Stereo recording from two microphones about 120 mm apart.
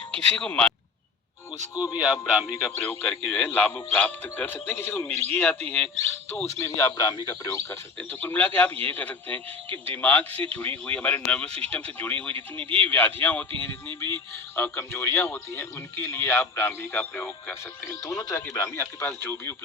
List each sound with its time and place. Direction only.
0.1 s a man's voice: 10° left (ahead or behind)
1.7 s a man's voice: 30° left (ahead or behind)
2.6 s a man's voice: 20° left (ahead or behind)
6.4 s a man's voice: 25° left (ahead or behind)
8.2 s a man's voice: 15° left (ahead or behind)
17.8 s speech: 30° left (ahead or behind)